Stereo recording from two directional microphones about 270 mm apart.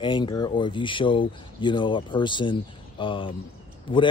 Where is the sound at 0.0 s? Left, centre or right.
Centre.